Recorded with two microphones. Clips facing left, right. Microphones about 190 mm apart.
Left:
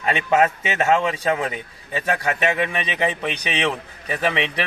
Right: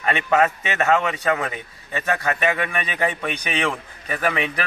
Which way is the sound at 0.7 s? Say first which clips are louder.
Left 1 dB; 25° left (ahead or behind).